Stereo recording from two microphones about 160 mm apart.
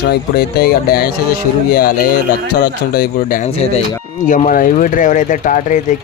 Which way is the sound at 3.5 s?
40° left (ahead or behind).